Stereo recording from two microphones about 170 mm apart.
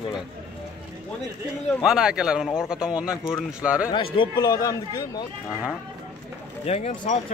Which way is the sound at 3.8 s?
30° left (ahead or behind).